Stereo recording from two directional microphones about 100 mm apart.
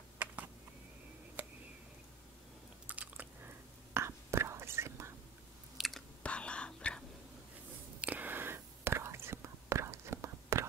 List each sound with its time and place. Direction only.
2.9 s whispering: 15° right (ahead or behind)
5.8 s chewing: centre (ahead or behind)
6.2 s whispering: 10° left (ahead or behind)
8.0 s whispering: 15° right (ahead or behind)